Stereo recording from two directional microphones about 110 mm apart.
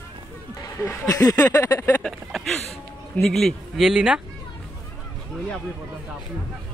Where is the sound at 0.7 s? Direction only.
25° left (ahead or behind).